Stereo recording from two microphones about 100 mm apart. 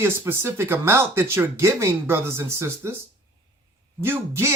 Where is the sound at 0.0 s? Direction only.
25° right (ahead or behind).